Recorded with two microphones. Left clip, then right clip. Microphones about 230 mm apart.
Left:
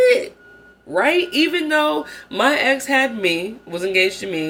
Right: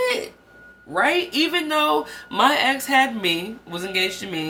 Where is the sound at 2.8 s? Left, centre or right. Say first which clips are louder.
Left 1 dB; right.